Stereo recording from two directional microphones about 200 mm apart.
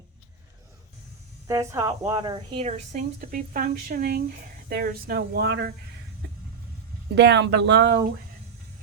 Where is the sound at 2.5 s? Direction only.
35° right (ahead or behind); by 5.7 s 55° right (ahead or behind).